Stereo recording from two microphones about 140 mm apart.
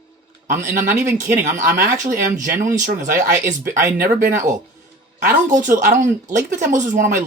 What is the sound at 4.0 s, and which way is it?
A woman's voice, 70° right (ahead or behind).